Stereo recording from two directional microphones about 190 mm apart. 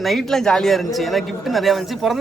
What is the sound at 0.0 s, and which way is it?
Speech, centre (ahead or behind).